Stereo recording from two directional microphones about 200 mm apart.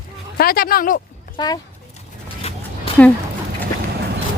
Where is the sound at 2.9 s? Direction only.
30° left (ahead or behind).